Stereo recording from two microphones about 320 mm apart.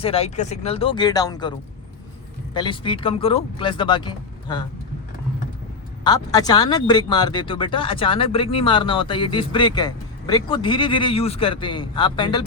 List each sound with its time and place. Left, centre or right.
0.0 s speech: centre
6.1 s speech: centre